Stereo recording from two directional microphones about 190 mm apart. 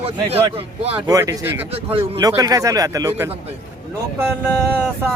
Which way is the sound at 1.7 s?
30° right (ahead or behind).